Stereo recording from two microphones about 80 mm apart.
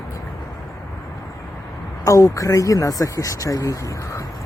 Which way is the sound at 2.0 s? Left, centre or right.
Left.